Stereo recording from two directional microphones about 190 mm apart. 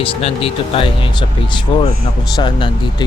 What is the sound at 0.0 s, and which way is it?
Speech, 30° left (ahead or behind).